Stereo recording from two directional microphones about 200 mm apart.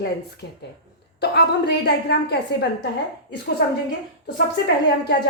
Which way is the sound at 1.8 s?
55° left (ahead or behind).